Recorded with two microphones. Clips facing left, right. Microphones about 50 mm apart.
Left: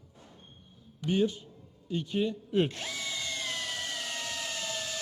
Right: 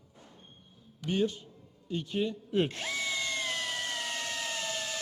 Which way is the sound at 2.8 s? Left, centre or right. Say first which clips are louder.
Right 3 dB; right.